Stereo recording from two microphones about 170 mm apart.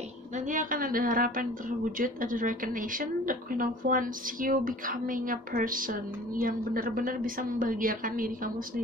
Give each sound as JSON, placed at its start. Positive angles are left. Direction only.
{"t": 0.5, "sound": "a woman's voice", "side_deg": -50}